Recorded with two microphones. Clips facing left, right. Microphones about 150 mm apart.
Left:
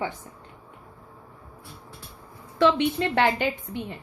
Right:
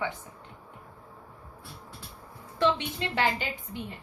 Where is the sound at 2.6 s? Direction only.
80° left.